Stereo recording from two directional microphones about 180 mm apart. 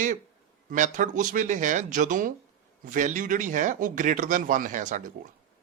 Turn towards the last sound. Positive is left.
turn(degrees=-45)  # may be behind; listen again after turning